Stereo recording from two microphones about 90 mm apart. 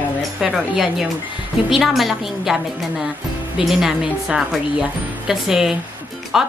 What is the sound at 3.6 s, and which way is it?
A woman's voice, 5° right (ahead or behind).